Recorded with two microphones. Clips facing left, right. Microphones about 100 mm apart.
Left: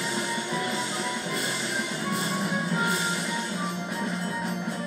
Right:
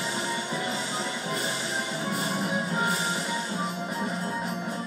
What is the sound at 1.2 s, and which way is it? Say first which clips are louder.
Music: even; 35° right (ahead or behind).